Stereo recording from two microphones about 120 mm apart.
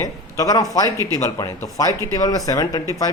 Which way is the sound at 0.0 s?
30° left (ahead or behind).